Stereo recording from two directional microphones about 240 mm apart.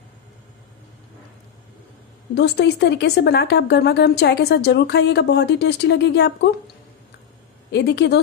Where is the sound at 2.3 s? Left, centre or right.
Left.